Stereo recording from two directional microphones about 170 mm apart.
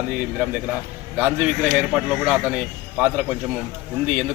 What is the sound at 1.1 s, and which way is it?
A man's voice, 10° right (ahead or behind).